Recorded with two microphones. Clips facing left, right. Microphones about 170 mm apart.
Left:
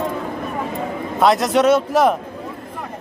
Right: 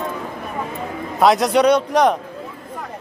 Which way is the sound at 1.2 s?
Centre (ahead or behind).